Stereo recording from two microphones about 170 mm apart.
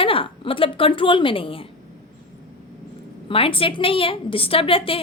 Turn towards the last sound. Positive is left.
turn(degrees=30)  # may be behind; listen again after turning